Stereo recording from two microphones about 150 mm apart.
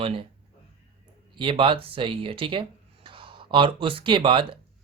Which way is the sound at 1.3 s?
35° right (ahead or behind).